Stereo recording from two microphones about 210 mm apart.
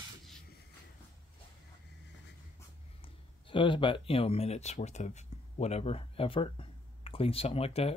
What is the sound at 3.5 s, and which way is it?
Speech, 25° left (ahead or behind).